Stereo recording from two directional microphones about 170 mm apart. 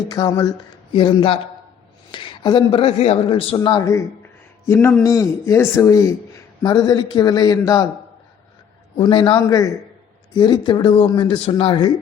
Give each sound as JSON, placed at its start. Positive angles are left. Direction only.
{"t": 0.1, "sound": "a man's voice", "side_deg": 25}
{"t": 9.0, "sound": "a man's voice", "side_deg": 30}